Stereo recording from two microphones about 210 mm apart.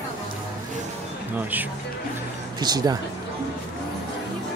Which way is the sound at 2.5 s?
20° right (ahead or behind).